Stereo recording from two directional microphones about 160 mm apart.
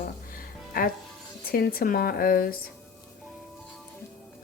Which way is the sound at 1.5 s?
70° left (ahead or behind).